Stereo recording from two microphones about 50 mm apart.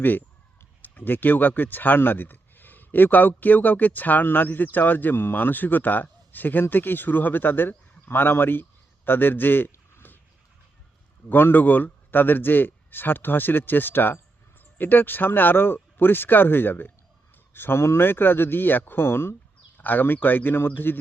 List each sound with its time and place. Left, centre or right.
0.0 s speech: left
11.3 s speech: left
17.5 s a sound: left
17.7 s speech: left
18.0 s speech: left
19.8 s speech: left